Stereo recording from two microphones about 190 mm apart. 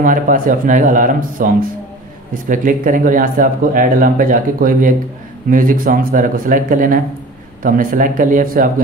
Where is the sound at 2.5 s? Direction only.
45° right (ahead or behind).